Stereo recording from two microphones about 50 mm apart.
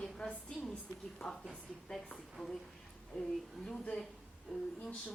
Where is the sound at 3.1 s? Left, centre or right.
Left.